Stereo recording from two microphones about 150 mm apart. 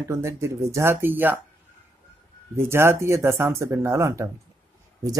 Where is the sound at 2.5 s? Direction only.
15° right (ahead or behind).